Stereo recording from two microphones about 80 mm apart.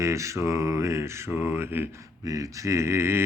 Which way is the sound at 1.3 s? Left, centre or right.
Right.